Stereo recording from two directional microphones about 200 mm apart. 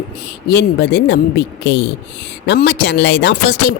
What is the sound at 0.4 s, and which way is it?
Speech, 55° left (ahead or behind).